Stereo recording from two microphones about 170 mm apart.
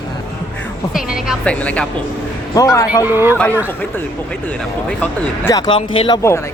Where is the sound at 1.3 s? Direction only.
5° left (ahead or behind).